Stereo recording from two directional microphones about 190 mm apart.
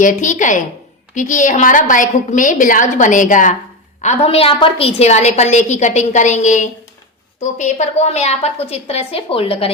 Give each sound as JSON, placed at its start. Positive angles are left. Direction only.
{"t": 0.0, "sound": "a woman's voice", "side_deg": 40}